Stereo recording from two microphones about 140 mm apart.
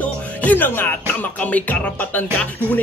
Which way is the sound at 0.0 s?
10° left (ahead or behind).